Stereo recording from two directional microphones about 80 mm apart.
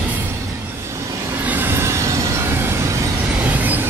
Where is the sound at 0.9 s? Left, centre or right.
Right.